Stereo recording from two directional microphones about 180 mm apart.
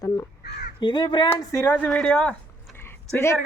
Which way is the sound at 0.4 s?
70° left (ahead or behind).